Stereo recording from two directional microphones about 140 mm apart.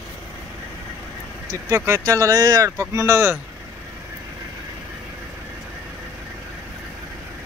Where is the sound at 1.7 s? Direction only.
20° right (ahead or behind).